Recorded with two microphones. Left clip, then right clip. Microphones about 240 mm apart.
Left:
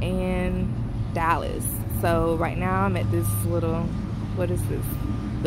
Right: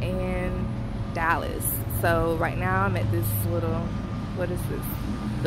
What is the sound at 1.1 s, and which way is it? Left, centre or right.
A woman's voice, centre.